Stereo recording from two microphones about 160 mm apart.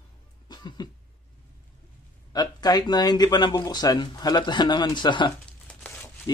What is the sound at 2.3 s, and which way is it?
Speech, 25° left (ahead or behind).